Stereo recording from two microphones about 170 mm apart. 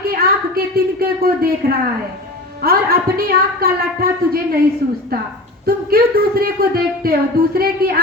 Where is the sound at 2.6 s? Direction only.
60° right (ahead or behind).